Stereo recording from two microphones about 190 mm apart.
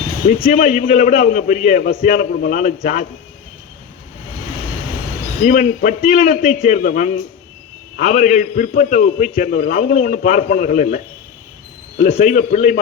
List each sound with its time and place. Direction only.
0.5 s a man's voice: 45° left (ahead or behind)
5.4 s a man's voice: 45° left (ahead or behind)